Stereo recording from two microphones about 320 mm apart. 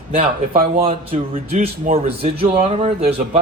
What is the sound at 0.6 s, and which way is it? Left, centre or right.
A man's voice, centre.